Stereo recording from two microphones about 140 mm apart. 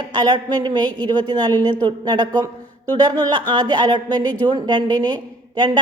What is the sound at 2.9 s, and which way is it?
A woman's voice, 35° right (ahead or behind).